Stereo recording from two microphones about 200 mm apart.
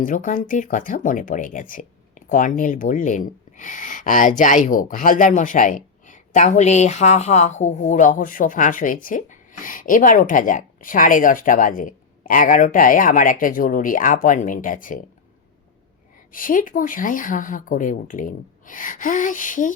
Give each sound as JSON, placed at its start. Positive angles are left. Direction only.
{"t": 0.0, "sound": "speech", "side_deg": 40}
{"t": 16.3, "sound": "speech", "side_deg": 45}